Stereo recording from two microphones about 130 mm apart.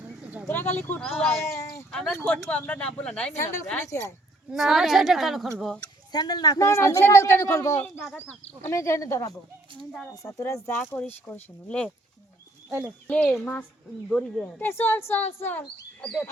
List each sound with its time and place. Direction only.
0.4 s speech: 15° left (ahead or behind)
1.0 s a woman's voice: 5° left (ahead or behind)
1.4 s a sound: 25° left (ahead or behind)
1.9 s speech: 5° left (ahead or behind)
3.3 s a man's voice: 25° left (ahead or behind)
4.5 s a woman's voice: centre (ahead or behind)
6.1 s a man's voice: 30° left (ahead or behind); by 11.3 s 10° left (ahead or behind)
13.1 s speech: 10° left (ahead or behind)